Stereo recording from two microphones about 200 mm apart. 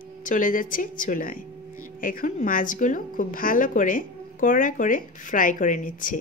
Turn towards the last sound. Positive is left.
turn(degrees=40)  # may be behind; listen again after turning